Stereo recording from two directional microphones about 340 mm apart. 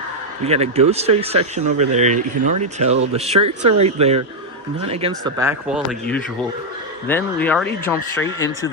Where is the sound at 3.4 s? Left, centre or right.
Right.